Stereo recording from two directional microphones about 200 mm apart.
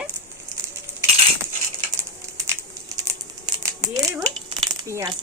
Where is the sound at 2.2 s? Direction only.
15° right (ahead or behind).